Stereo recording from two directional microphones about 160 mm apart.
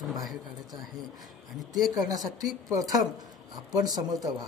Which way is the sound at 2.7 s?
20° right (ahead or behind).